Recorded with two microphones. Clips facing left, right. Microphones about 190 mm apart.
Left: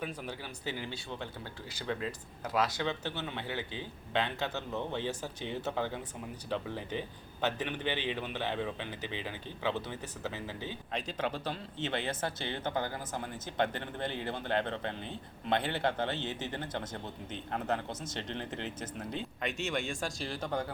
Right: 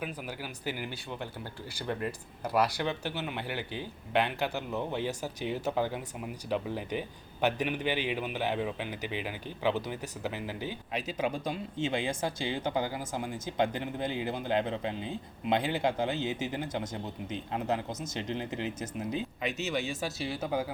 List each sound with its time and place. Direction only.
0.0 s speech: 5° right (ahead or behind)
1.9 s speech: 15° right (ahead or behind)
3.6 s speech: 20° left (ahead or behind)
4.1 s speech: 10° right (ahead or behind)